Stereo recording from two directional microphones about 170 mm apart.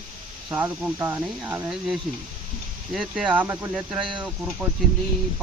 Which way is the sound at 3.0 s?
5° right (ahead or behind).